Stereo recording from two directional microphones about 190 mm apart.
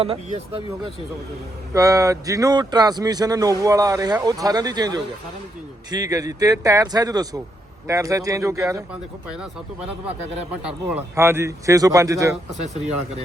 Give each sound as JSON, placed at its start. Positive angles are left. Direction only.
{"t": 0.0, "sound": "speech", "side_deg": -30}
{"t": 1.7, "sound": "a man's voice", "side_deg": -20}
{"t": 10.6, "sound": "speech", "side_deg": -5}